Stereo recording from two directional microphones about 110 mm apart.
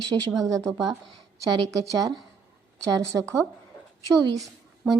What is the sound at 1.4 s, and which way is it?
A woman's voice, 30° right (ahead or behind).